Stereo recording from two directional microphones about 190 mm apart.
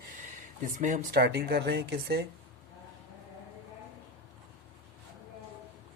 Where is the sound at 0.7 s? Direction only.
45° right (ahead or behind); by 2.3 s 60° right (ahead or behind).